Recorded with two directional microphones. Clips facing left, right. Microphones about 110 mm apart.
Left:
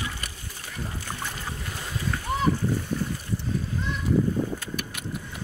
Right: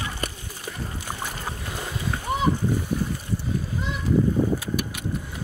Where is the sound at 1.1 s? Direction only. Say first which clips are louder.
Right 4 dB; 15° right (ahead or behind).